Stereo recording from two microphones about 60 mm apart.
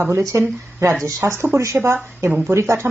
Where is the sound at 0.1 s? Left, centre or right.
Right.